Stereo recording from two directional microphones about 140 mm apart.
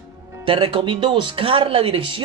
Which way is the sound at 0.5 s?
40° right (ahead or behind).